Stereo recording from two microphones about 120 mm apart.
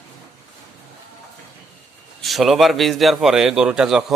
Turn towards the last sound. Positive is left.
turn(degrees=-5)  # may be behind; listen again after turning